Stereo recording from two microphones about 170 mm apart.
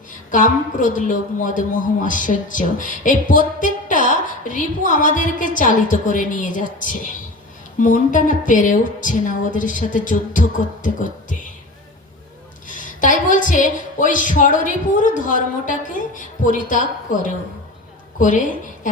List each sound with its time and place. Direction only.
0.3 s a woman's voice: 50° left (ahead or behind)
12.6 s a woman's voice: 50° left (ahead or behind)